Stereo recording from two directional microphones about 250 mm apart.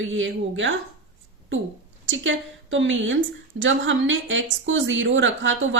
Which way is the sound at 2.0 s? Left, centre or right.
Right.